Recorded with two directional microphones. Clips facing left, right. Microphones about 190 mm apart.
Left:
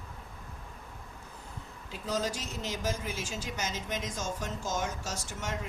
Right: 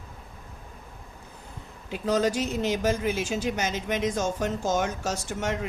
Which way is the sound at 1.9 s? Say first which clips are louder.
Right 9 dB; 65° right (ahead or behind).